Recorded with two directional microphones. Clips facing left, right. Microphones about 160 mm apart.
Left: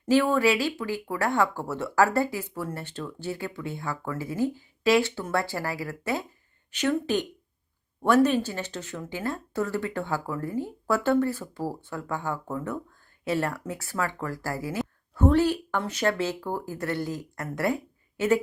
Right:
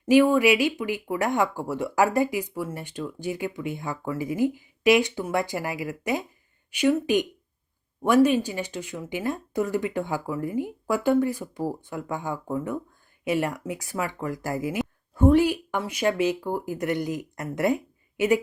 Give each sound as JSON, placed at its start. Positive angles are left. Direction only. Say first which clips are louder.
{"t": 0.0, "sound": "speech", "louder": "right 4 dB", "side_deg": -15}